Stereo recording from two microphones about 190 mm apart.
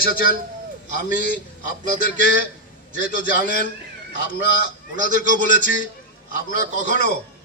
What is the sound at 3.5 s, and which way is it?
Speech, 40° right (ahead or behind).